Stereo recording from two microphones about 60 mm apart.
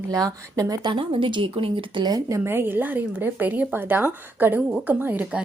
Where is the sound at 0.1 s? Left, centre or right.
Right.